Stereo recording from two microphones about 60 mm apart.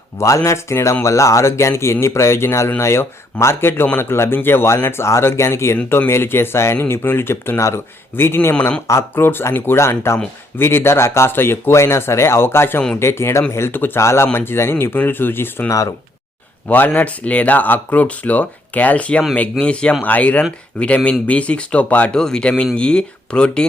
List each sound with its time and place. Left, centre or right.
0.2 s speech: left
14.0 s speech: left
22.1 s speech: centre